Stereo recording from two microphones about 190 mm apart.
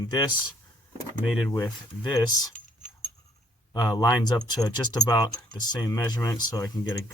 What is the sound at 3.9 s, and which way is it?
Speech, 20° left (ahead or behind).